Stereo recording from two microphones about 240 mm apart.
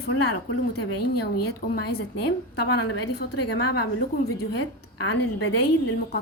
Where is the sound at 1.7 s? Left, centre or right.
Left.